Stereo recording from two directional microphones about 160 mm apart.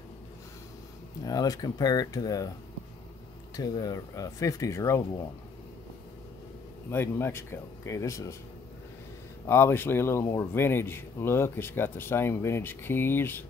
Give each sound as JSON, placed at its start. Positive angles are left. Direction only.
{"t": 1.2, "sound": "speech", "side_deg": 25}
{"t": 3.5, "sound": "speech", "side_deg": 25}
{"t": 6.9, "sound": "speech", "side_deg": 15}
{"t": 9.5, "sound": "speech", "side_deg": 15}